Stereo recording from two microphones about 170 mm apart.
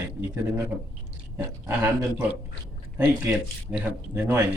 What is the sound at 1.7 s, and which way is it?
Speech, 10° right (ahead or behind).